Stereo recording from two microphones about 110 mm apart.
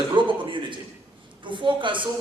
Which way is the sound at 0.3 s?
50° right (ahead or behind).